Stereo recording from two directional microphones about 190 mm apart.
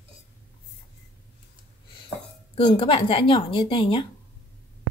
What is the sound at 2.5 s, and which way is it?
Speech, 30° left (ahead or behind).